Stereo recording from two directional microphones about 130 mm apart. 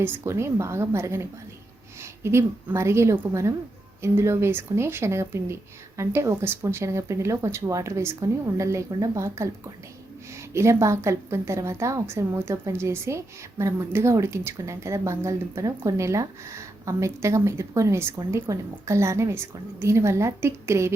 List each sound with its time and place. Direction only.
0.0 s a woman's voice: 20° right (ahead or behind)